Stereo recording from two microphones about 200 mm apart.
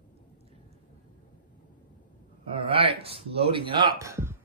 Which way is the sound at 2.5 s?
25° right (ahead or behind).